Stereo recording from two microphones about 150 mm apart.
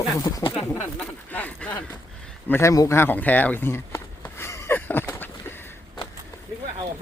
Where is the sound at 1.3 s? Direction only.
10° left (ahead or behind).